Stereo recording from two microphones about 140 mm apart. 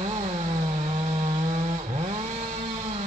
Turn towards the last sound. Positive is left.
turn(degrees=-55)  # may be behind; listen again after turning